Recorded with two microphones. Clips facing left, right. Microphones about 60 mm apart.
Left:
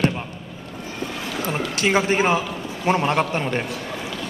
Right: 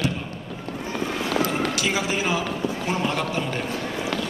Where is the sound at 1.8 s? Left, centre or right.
Left.